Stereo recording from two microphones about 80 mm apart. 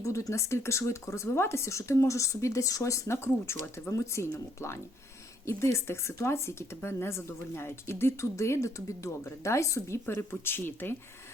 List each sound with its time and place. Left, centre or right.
0.0 s a woman's voice: left